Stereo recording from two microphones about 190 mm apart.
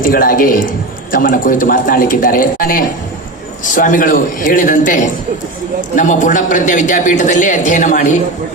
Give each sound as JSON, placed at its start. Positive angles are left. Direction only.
{"t": 0.0, "sound": "a man's voice", "side_deg": 50}